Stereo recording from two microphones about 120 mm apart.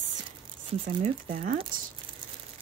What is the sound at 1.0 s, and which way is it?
Speech, 65° right (ahead or behind).